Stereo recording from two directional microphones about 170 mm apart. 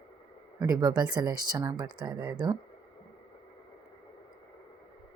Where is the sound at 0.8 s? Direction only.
25° right (ahead or behind).